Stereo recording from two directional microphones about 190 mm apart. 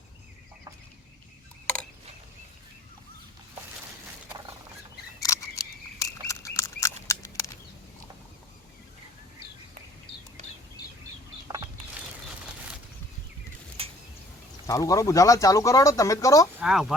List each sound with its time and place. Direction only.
1.6 s a sound: 5° left (ahead or behind)
5.2 s duck: 15° left (ahead or behind)
14.7 s speech: 15° left (ahead or behind)
16.6 s speech: centre (ahead or behind)